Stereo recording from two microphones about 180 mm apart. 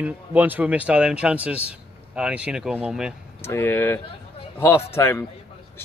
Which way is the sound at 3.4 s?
15° left (ahead or behind).